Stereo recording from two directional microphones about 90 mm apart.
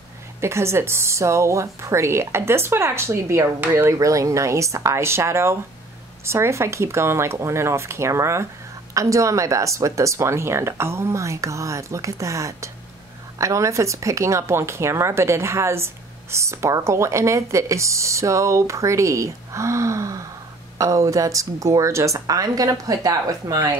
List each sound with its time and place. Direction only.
0.4 s speech: 30° right (ahead or behind)